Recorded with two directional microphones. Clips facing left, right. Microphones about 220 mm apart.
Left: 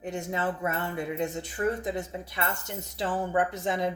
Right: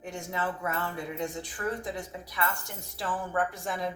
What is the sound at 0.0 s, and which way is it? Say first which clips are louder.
Speech: left 3 dB; 20° left (ahead or behind).